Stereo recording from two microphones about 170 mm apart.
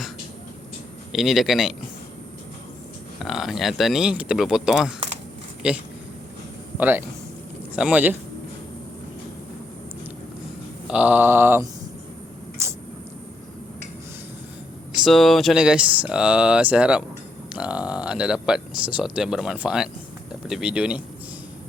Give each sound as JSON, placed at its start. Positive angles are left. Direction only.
{"t": 1.1, "sound": "speech", "side_deg": 0}
{"t": 3.2, "sound": "speech", "side_deg": 0}
{"t": 10.8, "sound": "speech", "side_deg": -10}
{"t": 12.6, "sound": "a sound", "side_deg": -15}
{"t": 15.0, "sound": "speech", "side_deg": 0}